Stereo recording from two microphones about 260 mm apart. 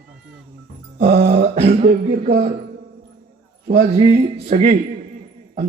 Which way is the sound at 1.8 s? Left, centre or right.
Right.